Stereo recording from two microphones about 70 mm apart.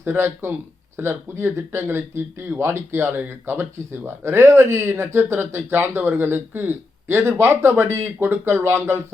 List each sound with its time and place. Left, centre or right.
0.0 s speech: right